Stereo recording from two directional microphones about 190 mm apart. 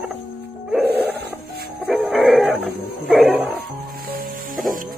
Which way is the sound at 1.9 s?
Centre (ahead or behind).